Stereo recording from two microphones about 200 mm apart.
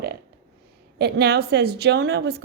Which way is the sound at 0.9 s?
55° right (ahead or behind).